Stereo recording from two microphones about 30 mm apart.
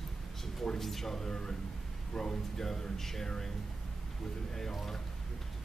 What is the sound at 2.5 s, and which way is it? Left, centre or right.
Speech, centre.